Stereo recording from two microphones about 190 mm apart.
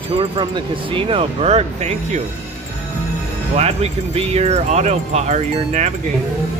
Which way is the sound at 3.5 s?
35° right (ahead or behind).